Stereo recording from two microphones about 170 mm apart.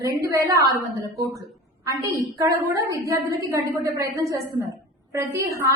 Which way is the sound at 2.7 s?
20° right (ahead or behind).